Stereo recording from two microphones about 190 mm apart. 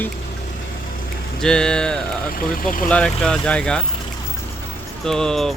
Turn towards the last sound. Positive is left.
turn(degrees=0)  # may be behind; listen again after turning